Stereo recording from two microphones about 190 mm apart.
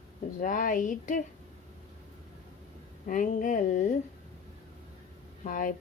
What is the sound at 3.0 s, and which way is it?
Speech, 45° left (ahead or behind).